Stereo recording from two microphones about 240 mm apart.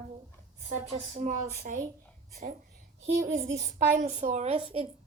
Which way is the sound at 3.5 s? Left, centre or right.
Right.